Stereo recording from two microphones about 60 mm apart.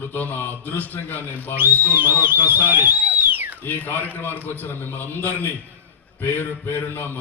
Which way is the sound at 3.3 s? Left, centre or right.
Right.